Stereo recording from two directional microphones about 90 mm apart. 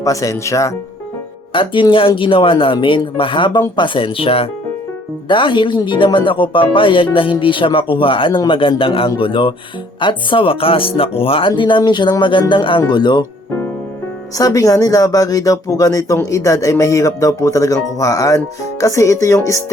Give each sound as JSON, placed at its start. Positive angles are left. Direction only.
{"t": 0.0, "sound": "speech", "side_deg": 35}
{"t": 1.5, "sound": "speech", "side_deg": 70}
{"t": 5.3, "sound": "speech", "side_deg": 65}
{"t": 8.8, "sound": "speech", "side_deg": 80}
{"t": 14.3, "sound": "speech", "side_deg": 40}